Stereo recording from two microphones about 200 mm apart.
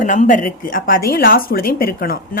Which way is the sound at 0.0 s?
40° left (ahead or behind).